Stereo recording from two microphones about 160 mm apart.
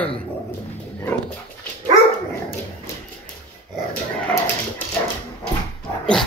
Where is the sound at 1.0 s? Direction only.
10° left (ahead or behind).